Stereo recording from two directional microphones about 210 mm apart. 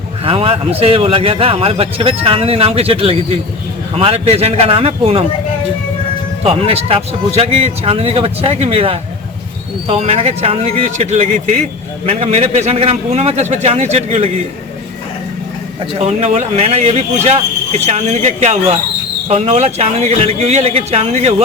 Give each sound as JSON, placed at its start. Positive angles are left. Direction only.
{"t": 0.3, "sound": "speech", "side_deg": -25}
{"t": 6.4, "sound": "speech", "side_deg": -25}
{"t": 16.0, "sound": "speech", "side_deg": -30}